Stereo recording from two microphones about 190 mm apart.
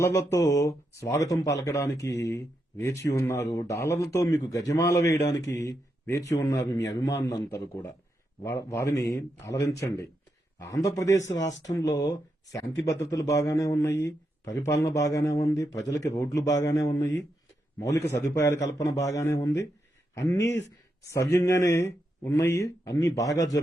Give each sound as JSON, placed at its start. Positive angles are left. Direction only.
{"t": 0.0, "sound": "a man's voice", "side_deg": 20}
{"t": 20.4, "sound": "speech", "side_deg": 70}
{"t": 20.7, "sound": "speech", "side_deg": 15}